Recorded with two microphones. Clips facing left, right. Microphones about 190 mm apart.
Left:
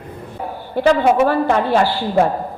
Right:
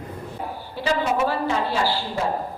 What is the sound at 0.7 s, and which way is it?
A woman's voice, 60° left (ahead or behind).